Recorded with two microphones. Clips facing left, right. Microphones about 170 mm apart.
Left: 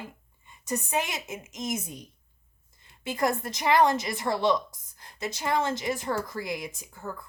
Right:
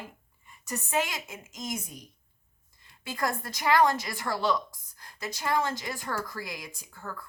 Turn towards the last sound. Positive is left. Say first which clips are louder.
# left 3 dB
turn(degrees=20)  # may be behind; listen again after turning